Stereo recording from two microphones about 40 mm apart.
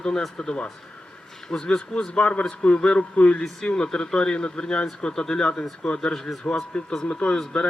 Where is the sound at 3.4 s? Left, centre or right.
Centre.